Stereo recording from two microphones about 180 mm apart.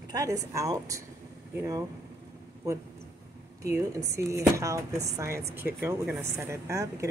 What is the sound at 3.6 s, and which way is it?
Speech, 15° right (ahead or behind).